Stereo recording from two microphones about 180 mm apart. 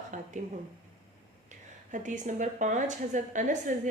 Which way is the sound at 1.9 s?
45° right (ahead or behind).